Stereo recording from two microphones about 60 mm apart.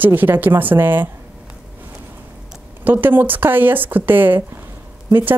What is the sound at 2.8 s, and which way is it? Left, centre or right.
Speech, right.